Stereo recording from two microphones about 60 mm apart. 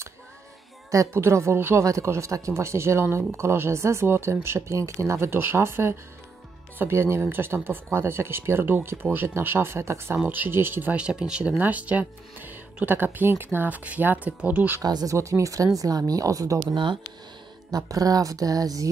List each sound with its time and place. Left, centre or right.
1.1 s speech: right
11.0 s speech: centre; by 14.8 s right
15.1 s speech: right
17.6 s speech: right